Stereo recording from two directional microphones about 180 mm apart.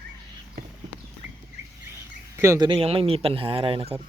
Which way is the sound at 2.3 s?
15° right (ahead or behind).